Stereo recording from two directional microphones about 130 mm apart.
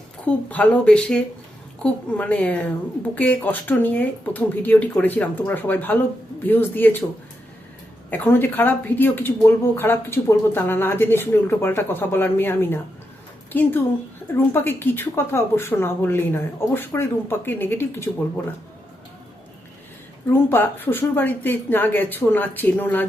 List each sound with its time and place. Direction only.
0.5 s speech: 10° left (ahead or behind)
8.1 s speech: 15° left (ahead or behind)
20.3 s speech: 15° left (ahead or behind)